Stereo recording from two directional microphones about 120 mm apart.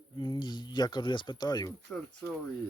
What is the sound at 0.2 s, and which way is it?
Speech, 40° left (ahead or behind).